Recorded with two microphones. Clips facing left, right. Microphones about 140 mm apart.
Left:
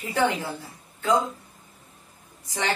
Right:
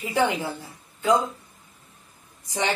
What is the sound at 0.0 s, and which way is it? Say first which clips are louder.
Speech: right 1 dB; 20° right (ahead or behind).